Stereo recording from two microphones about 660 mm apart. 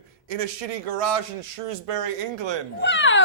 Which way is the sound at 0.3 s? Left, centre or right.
Right.